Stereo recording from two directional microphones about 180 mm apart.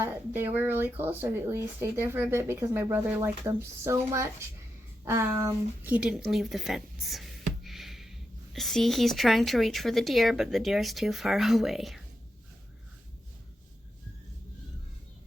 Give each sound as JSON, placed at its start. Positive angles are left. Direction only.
{"t": 0.0, "sound": "speech", "side_deg": -10}